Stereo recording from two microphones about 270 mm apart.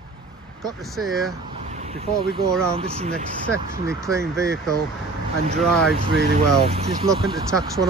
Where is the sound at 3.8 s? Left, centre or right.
Centre.